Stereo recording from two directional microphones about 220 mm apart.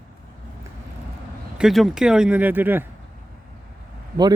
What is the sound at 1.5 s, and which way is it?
A man's voice, centre (ahead or behind).